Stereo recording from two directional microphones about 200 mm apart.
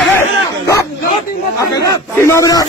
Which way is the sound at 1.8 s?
15° left (ahead or behind).